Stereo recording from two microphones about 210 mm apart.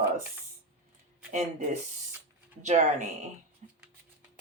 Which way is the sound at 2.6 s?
35° right (ahead or behind).